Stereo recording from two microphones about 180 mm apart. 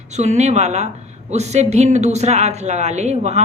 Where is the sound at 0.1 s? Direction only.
40° right (ahead or behind).